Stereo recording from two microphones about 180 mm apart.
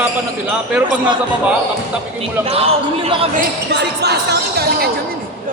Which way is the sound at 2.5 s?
35° right (ahead or behind).